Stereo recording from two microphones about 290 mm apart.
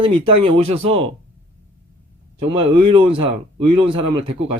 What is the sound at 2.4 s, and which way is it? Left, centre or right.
Speech, centre.